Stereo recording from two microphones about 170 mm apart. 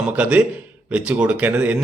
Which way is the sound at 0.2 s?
10° right (ahead or behind).